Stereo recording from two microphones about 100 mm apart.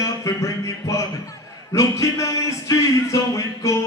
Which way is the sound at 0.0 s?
30° left (ahead or behind).